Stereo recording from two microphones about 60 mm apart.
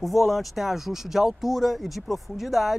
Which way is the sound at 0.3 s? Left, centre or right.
Centre.